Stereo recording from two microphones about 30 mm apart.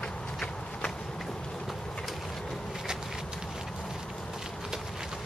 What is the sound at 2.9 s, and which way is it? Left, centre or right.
Walk, right.